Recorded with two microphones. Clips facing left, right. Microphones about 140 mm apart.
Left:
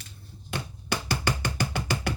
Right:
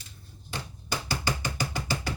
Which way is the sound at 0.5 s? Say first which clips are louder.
Left 3 dB; 60° left (ahead or behind).